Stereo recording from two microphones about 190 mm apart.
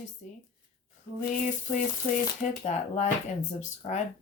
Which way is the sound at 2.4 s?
40° left (ahead or behind).